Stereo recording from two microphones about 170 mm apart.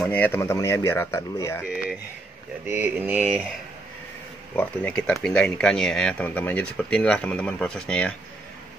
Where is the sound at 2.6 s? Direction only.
10° right (ahead or behind).